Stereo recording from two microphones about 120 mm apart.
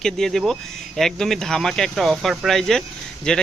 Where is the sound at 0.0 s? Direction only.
5° left (ahead or behind).